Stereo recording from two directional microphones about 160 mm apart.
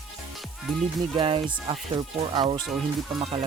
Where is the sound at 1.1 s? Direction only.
35° right (ahead or behind).